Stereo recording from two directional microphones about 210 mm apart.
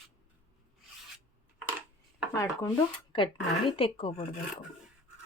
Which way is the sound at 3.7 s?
25° left (ahead or behind).